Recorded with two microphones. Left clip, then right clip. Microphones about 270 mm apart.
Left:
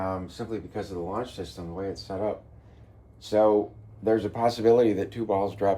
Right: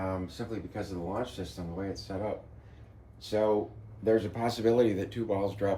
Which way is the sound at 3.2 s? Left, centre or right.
Left.